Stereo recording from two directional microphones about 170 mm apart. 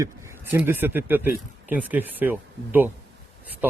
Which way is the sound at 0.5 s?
10° right (ahead or behind).